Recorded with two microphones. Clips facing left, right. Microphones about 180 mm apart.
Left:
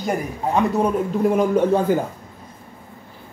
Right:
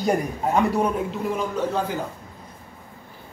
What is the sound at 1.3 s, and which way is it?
Speech, 55° left (ahead or behind).